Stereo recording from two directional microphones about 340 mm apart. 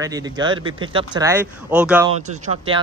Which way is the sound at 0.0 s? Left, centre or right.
Centre.